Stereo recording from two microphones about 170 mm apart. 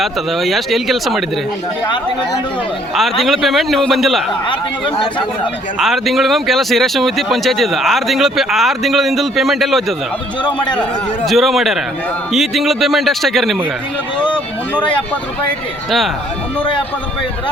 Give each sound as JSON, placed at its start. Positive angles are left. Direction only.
{"t": 0.0, "sound": "speech", "side_deg": 0}
{"t": 2.9, "sound": "speech", "side_deg": 0}
{"t": 5.8, "sound": "speech", "side_deg": 0}
{"t": 11.3, "sound": "speech", "side_deg": 0}
{"t": 14.2, "sound": "a sound", "side_deg": 5}